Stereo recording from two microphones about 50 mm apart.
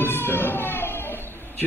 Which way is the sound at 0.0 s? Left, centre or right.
Left.